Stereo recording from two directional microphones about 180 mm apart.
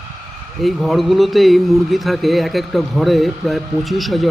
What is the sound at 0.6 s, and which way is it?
A man's voice, centre (ahead or behind).